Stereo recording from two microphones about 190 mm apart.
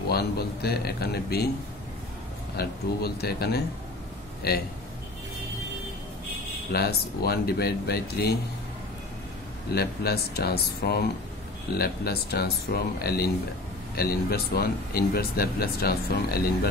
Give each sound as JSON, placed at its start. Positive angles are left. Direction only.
{"t": 0.1, "sound": "speech", "side_deg": 55}
{"t": 2.5, "sound": "speech", "side_deg": 55}
{"t": 6.7, "sound": "speech", "side_deg": 55}
{"t": 9.8, "sound": "speech", "side_deg": 55}